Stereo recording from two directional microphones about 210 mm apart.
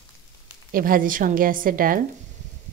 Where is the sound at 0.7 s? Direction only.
40° right (ahead or behind).